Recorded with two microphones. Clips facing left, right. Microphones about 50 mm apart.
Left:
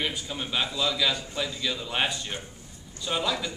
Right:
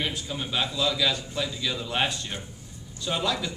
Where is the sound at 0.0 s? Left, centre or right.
Centre.